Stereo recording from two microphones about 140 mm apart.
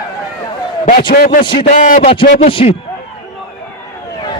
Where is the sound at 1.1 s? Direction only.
90° left.